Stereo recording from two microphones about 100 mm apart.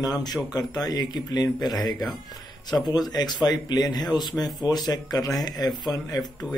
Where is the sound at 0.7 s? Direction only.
40° left (ahead or behind).